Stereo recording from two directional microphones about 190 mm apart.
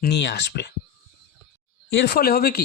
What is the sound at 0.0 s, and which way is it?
Speech, 60° left (ahead or behind).